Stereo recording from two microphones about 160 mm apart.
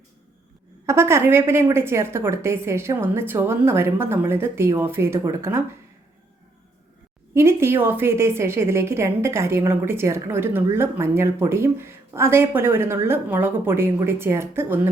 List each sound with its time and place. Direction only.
0.9 s a woman's voice: 15° right (ahead or behind)
7.3 s a woman's voice: 15° right (ahead or behind)